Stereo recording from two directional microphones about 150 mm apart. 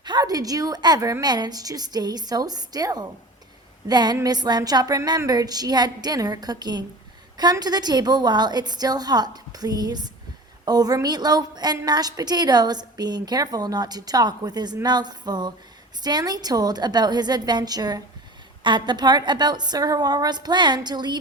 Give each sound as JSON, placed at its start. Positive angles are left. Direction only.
{"t": 0.0, "sound": "a woman's voice", "side_deg": -25}